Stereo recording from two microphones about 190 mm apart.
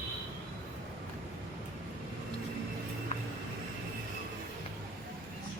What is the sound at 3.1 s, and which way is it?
Vehicle, 35° left (ahead or behind).